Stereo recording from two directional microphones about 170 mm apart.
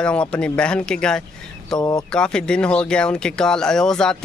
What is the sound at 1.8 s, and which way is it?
Speech, 20° left (ahead or behind).